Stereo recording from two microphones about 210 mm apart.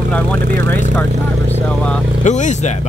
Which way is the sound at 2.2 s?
35° left (ahead or behind).